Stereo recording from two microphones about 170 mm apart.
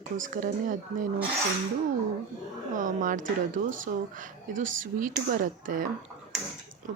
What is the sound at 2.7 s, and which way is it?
Speech, 50° right (ahead or behind).